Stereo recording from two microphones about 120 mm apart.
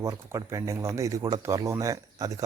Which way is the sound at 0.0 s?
25° right (ahead or behind).